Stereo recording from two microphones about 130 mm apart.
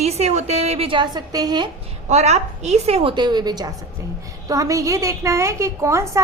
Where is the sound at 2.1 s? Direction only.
55° right (ahead or behind); by 6.1 s 20° right (ahead or behind).